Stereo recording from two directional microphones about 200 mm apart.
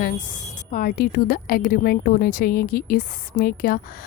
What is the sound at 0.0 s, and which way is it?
A woman's voice, 40° left (ahead or behind).